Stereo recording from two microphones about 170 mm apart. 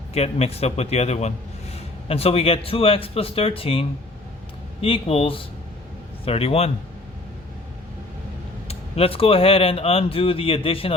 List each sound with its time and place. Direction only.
0.1 s speech: 40° left (ahead or behind)
8.6 s speech: 35° left (ahead or behind)